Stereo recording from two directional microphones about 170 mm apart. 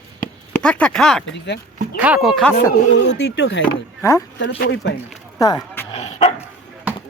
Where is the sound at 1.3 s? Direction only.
90° left.